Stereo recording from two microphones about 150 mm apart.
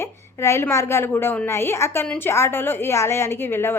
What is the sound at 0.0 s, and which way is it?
A woman's voice, 15° left (ahead or behind).